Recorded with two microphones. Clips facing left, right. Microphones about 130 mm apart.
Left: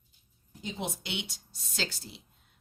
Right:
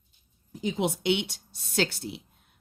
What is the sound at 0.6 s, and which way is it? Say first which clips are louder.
A woman's voice: right 10 dB; 80° right.